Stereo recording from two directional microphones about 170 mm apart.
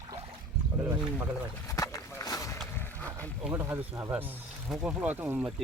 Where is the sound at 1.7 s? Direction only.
20° left (ahead or behind).